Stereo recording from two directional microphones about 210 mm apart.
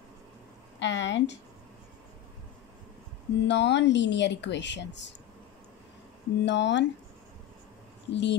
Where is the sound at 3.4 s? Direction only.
55° left (ahead or behind).